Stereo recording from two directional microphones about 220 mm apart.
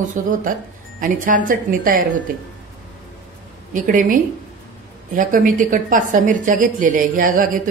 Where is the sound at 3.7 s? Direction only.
35° right (ahead or behind).